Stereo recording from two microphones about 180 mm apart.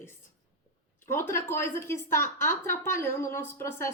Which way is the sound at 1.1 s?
15° left (ahead or behind).